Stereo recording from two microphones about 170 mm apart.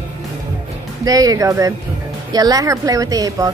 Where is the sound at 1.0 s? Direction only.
20° right (ahead or behind).